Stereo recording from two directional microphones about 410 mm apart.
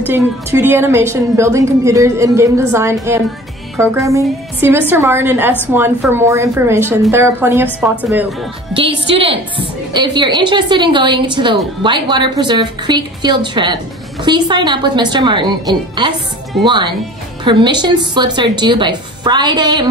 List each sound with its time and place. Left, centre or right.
0.0 s a woman's voice: centre